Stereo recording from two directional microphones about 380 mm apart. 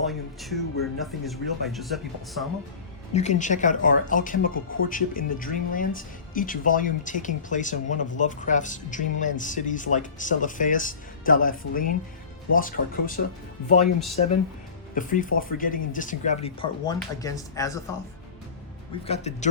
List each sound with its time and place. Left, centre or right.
0.1 s speech: centre
3.1 s speech: centre
14.9 s speech: left
19.0 s speech: centre